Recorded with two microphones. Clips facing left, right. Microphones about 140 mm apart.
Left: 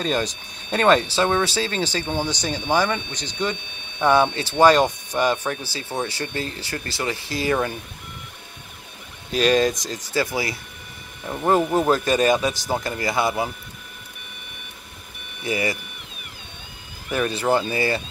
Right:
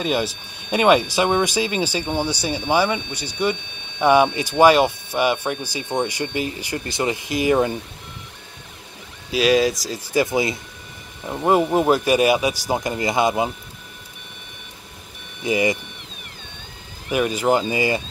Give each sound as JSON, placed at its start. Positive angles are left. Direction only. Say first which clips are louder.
{"t": 0.0, "sound": "speech", "louder": "right 2 dB", "side_deg": -10}
{"t": 9.3, "sound": "speech", "louder": "right 1 dB", "side_deg": -5}
{"t": 10.1, "sound": "speech", "louder": "right 5 dB", "side_deg": -20}
{"t": 15.4, "sound": "speech", "louder": "right 5 dB", "side_deg": -20}
{"t": 17.1, "sound": "speech", "louder": "right 2 dB", "side_deg": -10}